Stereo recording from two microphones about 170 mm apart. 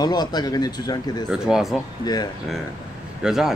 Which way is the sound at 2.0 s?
25° left (ahead or behind).